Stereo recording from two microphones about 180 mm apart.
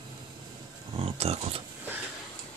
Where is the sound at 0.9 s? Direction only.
35° right (ahead or behind).